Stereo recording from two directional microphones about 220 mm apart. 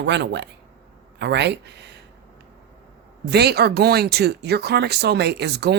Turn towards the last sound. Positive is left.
turn(degrees=-50)  # may be behind; listen again after turning